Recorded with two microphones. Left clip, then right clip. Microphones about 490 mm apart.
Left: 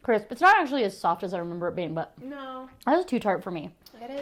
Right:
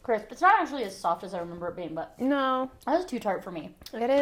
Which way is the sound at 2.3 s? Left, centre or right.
Right.